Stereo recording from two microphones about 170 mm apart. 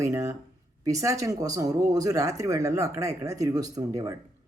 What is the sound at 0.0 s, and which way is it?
Speech, 15° right (ahead or behind).